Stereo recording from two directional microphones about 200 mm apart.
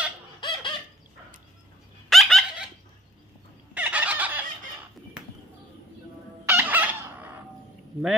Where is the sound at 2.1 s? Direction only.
Centre (ahead or behind).